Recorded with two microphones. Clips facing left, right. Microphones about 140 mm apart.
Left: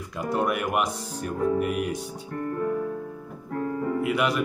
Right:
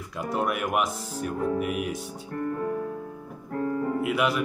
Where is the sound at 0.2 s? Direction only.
Centre (ahead or behind).